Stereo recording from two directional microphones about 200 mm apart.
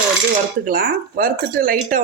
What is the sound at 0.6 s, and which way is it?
Speech, 45° right (ahead or behind).